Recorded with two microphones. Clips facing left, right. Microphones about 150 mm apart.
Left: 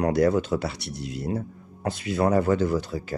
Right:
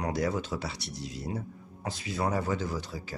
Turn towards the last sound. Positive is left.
turn(degrees=60)  # may be behind; listen again after turning